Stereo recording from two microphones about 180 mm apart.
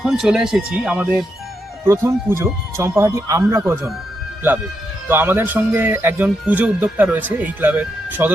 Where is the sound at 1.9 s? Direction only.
15° right (ahead or behind).